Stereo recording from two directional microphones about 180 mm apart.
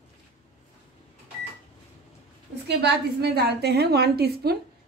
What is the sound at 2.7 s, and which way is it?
A woman's voice, 65° right (ahead or behind).